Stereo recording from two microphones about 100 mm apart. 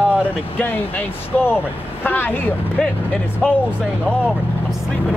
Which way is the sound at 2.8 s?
5° left (ahead or behind).